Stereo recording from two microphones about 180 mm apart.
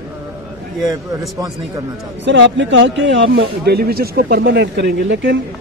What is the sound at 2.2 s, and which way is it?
Speech, 80° right.